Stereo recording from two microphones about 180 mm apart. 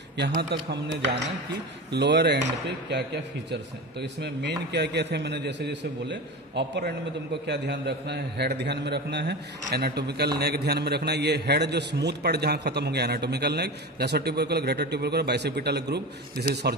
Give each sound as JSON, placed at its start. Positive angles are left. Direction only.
{"t": 0.4, "sound": "a man's voice", "side_deg": -70}
{"t": 4.0, "sound": "a man's voice", "side_deg": -70}